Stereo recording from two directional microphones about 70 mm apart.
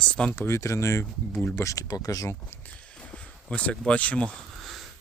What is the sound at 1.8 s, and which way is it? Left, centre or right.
Speech, left.